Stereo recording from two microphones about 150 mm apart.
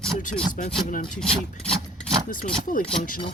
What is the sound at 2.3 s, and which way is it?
Speech, 60° left (ahead or behind).